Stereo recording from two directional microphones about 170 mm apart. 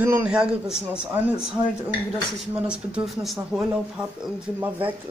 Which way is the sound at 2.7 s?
5° right (ahead or behind).